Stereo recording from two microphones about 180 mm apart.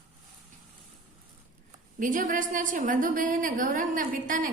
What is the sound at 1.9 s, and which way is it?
A woman's voice, 45° right (ahead or behind).